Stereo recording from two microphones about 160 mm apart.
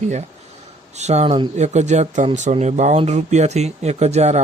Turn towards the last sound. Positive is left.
turn(degrees=-45)  # may be behind; listen again after turning